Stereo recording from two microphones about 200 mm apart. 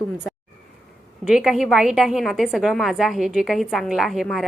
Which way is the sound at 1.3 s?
5° right (ahead or behind).